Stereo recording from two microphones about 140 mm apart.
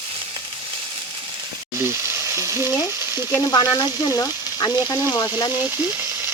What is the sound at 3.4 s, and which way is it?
Speech, 25° left (ahead or behind).